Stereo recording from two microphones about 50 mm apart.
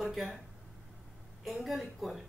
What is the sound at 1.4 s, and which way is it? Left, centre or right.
Speech, centre.